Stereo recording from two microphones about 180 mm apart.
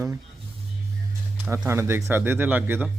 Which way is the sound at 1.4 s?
15° right (ahead or behind).